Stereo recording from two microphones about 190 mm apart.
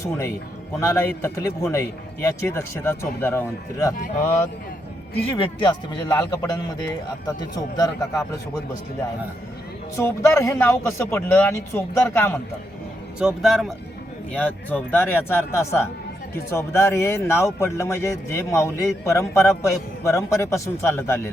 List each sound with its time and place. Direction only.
0.0 s a man's voice: 15° left (ahead or behind)
5.4 s speech: 25° left (ahead or behind)
9.9 s a man's voice: 15° left (ahead or behind)
13.1 s a man's voice: centre (ahead or behind)